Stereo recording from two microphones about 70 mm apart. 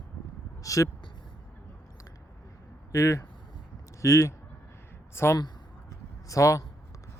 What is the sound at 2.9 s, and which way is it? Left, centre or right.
Speech, left.